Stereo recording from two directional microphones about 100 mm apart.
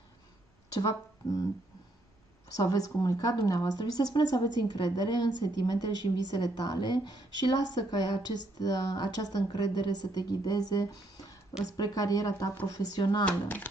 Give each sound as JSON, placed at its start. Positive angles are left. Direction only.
{"t": 0.7, "sound": "speech", "side_deg": 35}
{"t": 2.5, "sound": "a woman's voice", "side_deg": 35}
{"t": 13.2, "sound": "speech", "side_deg": 15}